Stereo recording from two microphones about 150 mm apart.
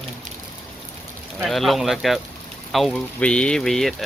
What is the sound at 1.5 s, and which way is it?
Speech, centre (ahead or behind).